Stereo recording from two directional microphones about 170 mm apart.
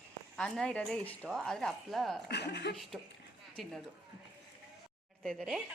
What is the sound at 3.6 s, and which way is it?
Speech, centre (ahead or behind).